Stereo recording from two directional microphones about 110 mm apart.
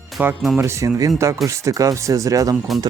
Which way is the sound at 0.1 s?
Centre (ahead or behind).